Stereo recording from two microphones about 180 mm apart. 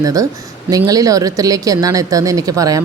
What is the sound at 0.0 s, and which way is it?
A woman's voice, 20° right (ahead or behind).